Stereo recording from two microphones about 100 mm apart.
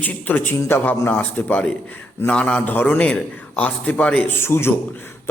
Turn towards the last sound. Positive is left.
turn(degrees=25)  # may be behind; listen again after turning